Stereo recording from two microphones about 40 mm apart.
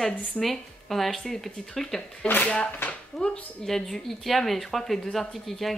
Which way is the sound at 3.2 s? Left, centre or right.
Left.